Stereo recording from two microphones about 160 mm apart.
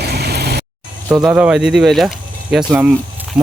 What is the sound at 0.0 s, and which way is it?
Vehicle, 90° right.